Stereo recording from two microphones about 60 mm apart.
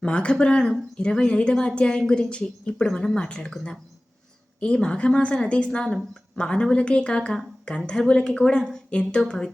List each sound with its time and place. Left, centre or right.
0.0 s a woman's voice: centre